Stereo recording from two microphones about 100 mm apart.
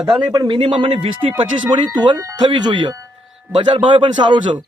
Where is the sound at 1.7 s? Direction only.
50° right (ahead or behind).